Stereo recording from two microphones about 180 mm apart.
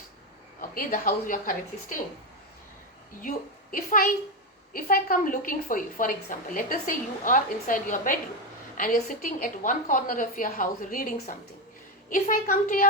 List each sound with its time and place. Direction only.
0.7 s a woman's voice: 50° left (ahead or behind)
3.2 s a woman's voice: 50° left (ahead or behind)